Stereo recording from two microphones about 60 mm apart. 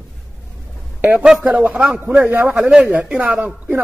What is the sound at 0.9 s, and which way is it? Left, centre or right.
Speech, right.